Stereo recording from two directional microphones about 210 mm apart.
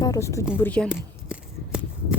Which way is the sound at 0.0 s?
15° left (ahead or behind).